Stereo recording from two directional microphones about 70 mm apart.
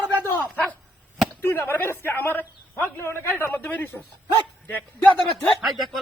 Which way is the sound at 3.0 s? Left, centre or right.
Left.